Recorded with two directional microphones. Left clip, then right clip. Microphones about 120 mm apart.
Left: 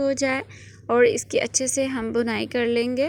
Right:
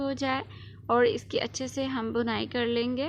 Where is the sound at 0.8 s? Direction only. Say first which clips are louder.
Left 6 dB; 15° left (ahead or behind).